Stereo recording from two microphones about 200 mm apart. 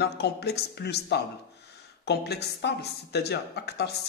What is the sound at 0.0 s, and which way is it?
A man's voice, 55° left (ahead or behind).